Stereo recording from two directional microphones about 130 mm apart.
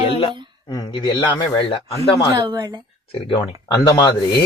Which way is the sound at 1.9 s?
25° left (ahead or behind).